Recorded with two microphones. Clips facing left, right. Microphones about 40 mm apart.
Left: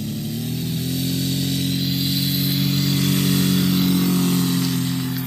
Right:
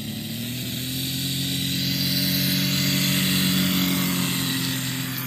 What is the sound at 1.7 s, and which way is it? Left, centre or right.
Music, right.